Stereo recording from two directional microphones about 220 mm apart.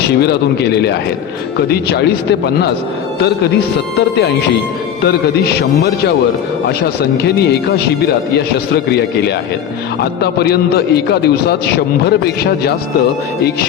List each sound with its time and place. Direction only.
0.0 s a man's voice: 50° left (ahead or behind)
7.3 s a man's voice: 50° left (ahead or behind)